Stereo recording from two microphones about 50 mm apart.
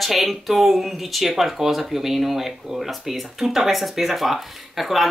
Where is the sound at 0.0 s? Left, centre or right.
Centre.